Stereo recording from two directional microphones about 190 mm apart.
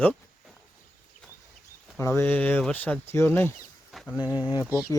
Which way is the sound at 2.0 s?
15° left (ahead or behind).